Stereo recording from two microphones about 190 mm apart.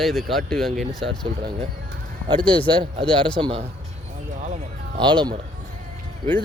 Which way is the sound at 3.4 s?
30° right (ahead or behind).